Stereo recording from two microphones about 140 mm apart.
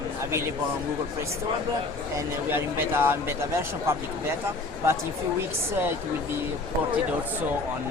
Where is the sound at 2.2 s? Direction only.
15° right (ahead or behind).